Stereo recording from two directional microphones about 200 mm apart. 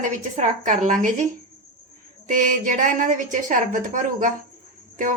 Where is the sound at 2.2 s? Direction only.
40° right (ahead or behind).